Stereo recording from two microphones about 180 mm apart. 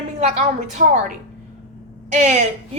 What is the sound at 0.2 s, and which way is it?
A woman's voice, 40° right (ahead or behind).